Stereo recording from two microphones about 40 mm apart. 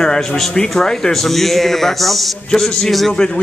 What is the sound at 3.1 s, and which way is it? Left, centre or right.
Speech, centre.